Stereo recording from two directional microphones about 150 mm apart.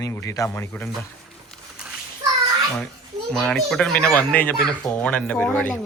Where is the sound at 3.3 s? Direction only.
5° left (ahead or behind).